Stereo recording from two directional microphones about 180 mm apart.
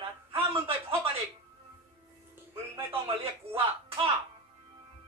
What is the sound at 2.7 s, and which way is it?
Music, 30° right (ahead or behind).